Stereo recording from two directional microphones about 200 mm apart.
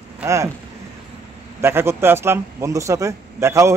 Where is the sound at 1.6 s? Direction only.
10° right (ahead or behind).